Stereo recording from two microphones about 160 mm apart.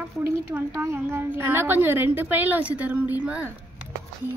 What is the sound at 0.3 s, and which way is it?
A woman's voice, 15° right (ahead or behind).